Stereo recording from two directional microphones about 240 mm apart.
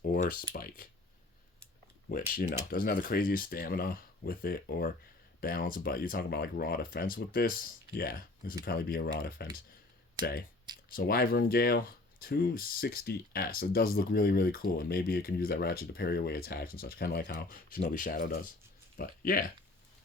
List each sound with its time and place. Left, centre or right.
0.0 s speech: left
2.0 s speech: left